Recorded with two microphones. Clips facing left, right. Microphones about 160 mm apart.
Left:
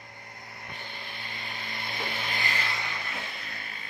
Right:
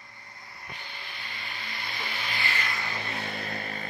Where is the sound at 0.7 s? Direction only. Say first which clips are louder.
Left 1 dB; 50° left (ahead or behind).